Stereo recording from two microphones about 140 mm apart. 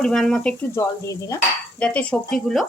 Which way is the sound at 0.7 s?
25° left (ahead or behind).